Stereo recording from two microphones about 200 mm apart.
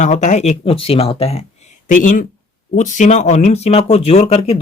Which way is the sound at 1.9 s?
40° left (ahead or behind).